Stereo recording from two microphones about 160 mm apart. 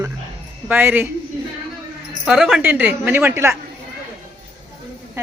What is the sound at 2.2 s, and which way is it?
A woman's voice, centre (ahead or behind).